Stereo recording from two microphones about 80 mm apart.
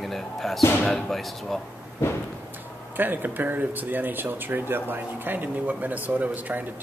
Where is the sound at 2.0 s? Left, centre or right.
Left.